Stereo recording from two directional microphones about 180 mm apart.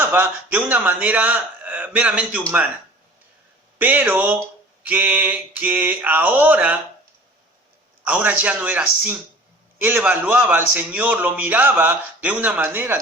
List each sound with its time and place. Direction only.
0.0 s a man's voice: 10° right (ahead or behind)
3.8 s a man's voice: 10° right (ahead or behind)
8.0 s a man's voice: 10° right (ahead or behind)